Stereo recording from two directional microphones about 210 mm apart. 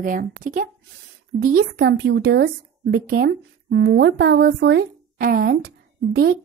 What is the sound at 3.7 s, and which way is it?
A woman's voice, 60° right (ahead or behind).